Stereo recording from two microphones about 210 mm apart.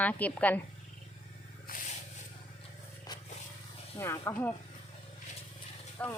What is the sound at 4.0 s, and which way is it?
Speech, 15° left (ahead or behind).